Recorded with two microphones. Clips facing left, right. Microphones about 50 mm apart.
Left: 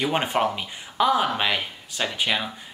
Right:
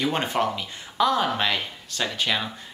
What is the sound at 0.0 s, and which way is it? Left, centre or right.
Speech, centre.